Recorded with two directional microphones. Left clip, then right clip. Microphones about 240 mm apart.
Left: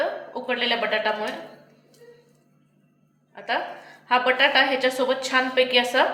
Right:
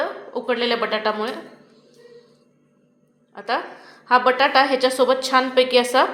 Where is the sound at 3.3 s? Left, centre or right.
Right.